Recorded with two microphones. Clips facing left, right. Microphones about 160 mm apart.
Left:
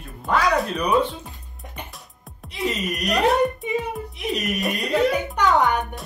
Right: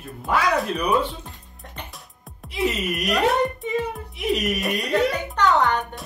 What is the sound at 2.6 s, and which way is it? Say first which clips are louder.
Speech: right 1 dB; 5° right (ahead or behind).